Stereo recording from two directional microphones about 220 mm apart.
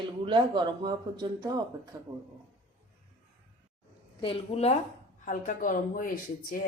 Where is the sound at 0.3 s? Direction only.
20° right (ahead or behind).